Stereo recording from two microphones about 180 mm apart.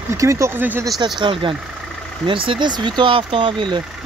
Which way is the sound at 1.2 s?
30° right (ahead or behind).